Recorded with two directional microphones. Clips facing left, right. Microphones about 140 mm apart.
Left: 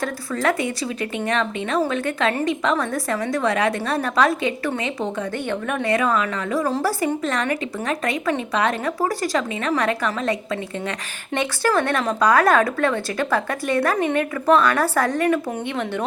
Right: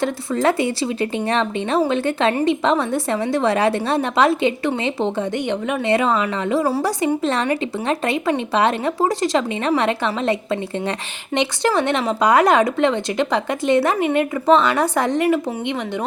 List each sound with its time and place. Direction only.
0.0 s speech: 25° right (ahead or behind)
6.7 s speech: 10° right (ahead or behind)
7.0 s speech: 30° right (ahead or behind); by 16.0 s 15° right (ahead or behind)